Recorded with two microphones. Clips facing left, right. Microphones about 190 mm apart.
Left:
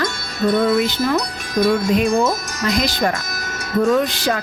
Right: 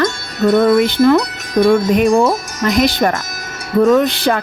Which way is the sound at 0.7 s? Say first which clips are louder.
Right 7 dB; 60° right (ahead or behind).